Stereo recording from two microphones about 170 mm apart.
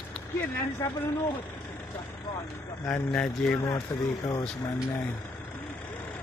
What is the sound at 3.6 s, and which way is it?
Speech, 30° left (ahead or behind).